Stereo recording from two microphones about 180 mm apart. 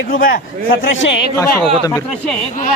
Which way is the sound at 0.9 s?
90° left.